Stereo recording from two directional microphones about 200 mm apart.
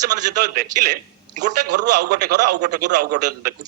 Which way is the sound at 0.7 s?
20° right (ahead or behind).